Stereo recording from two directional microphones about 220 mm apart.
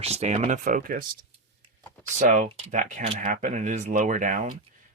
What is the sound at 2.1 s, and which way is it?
Speech, 35° right (ahead or behind).